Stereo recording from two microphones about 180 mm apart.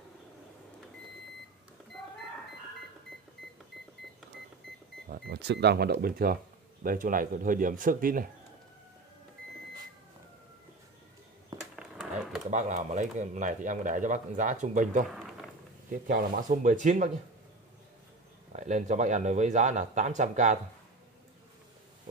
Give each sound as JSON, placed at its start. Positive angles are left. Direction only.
{"t": 5.1, "sound": "speech", "side_deg": -70}
{"t": 11.7, "sound": "a sound", "side_deg": 0}
{"t": 12.4, "sound": "speech", "side_deg": -40}
{"t": 15.0, "sound": "a sound", "side_deg": 0}
{"t": 15.9, "sound": "speech", "side_deg": -45}
{"t": 18.5, "sound": "speech", "side_deg": -40}